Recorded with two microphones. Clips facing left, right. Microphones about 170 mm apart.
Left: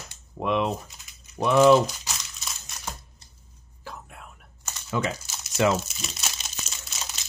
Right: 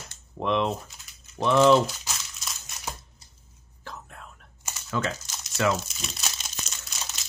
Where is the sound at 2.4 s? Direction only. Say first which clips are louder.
Even; 5° right (ahead or behind).